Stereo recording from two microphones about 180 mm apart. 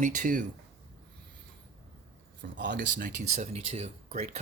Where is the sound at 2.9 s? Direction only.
45° right (ahead or behind).